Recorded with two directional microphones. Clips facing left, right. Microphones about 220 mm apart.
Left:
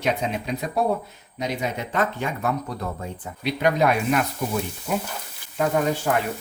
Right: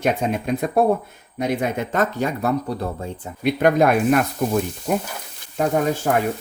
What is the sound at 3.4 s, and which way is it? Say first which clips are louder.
Speech: right 4 dB; 50° right (ahead or behind).